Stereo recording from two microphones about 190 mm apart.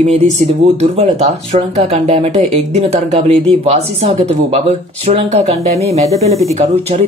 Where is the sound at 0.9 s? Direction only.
35° right (ahead or behind).